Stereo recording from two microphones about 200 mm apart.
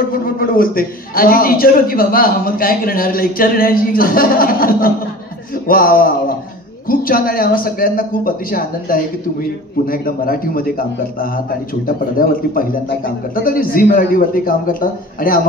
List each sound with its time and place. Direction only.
0.4 s a man's voice: 45° left (ahead or behind)